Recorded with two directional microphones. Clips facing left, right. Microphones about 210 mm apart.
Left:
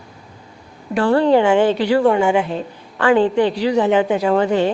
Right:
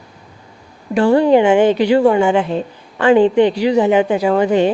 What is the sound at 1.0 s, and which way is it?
Speech, 15° right (ahead or behind).